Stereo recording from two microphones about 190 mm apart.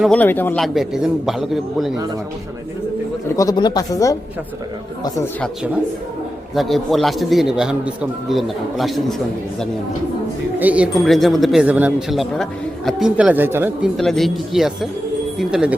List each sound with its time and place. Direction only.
0.0 s speech: 5° left (ahead or behind)
3.2 s speech: 15° left (ahead or behind)
6.5 s speech: centre (ahead or behind)